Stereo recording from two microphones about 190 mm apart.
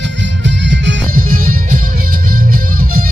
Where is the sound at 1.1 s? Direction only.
50° right (ahead or behind).